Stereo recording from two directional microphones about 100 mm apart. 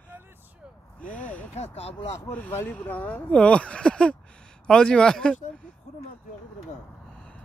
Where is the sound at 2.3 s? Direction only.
15° left (ahead or behind).